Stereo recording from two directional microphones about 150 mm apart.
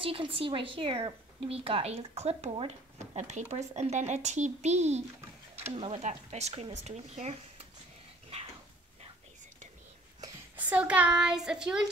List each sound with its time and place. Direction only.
0.0 s speech: 35° right (ahead or behind)
10.5 s a child's voice: 10° right (ahead or behind)